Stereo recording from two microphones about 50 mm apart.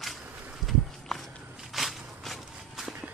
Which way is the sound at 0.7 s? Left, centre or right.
Centre.